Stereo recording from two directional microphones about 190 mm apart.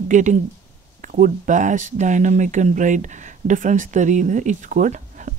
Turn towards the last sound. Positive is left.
turn(degrees=-40)  # may be behind; listen again after turning